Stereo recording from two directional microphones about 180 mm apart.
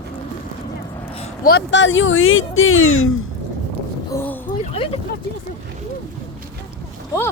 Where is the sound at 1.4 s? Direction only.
75° left (ahead or behind); by 2.8 s 90° left.